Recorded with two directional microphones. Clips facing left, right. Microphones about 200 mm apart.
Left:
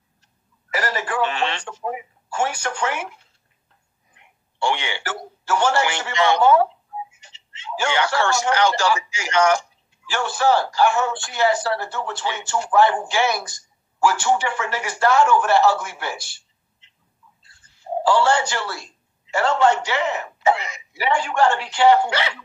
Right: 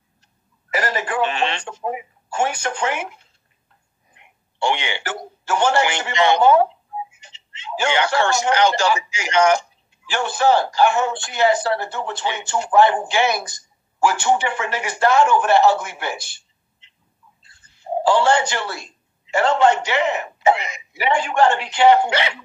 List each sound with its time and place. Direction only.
0.7 s telephone: 20° right (ahead or behind)
4.2 s a man's voice: 20° right (ahead or behind)